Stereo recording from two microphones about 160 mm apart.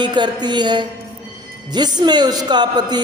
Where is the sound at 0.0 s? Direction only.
30° right (ahead or behind).